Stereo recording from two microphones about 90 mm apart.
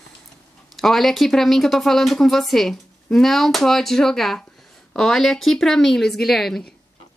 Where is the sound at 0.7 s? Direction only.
Centre (ahead or behind).